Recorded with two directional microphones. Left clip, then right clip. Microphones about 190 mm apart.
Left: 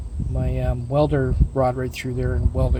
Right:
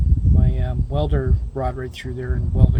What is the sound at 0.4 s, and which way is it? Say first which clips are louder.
Speech: left 3 dB; 25° left (ahead or behind).